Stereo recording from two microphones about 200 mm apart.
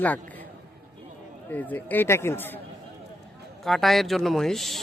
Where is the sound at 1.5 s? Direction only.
10° left (ahead or behind).